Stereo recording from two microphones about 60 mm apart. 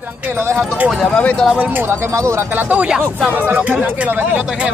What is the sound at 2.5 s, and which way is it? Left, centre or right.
Speech, right.